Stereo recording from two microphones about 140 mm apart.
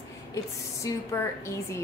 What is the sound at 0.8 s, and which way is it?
Speech, 20° left (ahead or behind).